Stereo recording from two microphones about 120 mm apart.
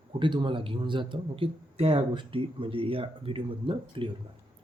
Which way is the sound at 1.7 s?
55° right (ahead or behind).